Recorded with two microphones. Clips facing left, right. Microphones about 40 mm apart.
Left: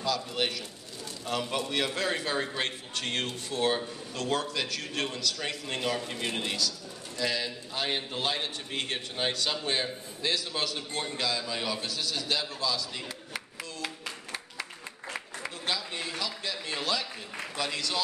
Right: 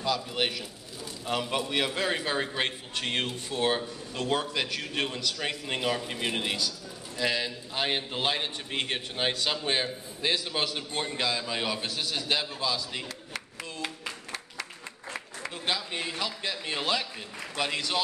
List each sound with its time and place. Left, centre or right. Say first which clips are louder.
0.0 s a man's voice: right 1 dB; centre
13.7 s clapping: right 2 dB; centre
14.3 s applause: even; centre
15.6 s a man's voice: right 2 dB; right